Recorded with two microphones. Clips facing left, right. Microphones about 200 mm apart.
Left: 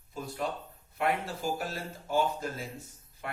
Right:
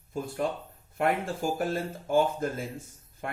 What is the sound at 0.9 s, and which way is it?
Speech, 50° right (ahead or behind).